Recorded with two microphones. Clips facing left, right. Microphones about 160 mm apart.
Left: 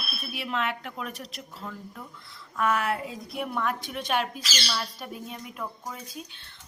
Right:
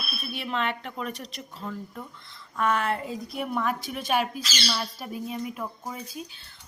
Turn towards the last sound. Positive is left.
turn(degrees=0)  # may be behind; listen again after turning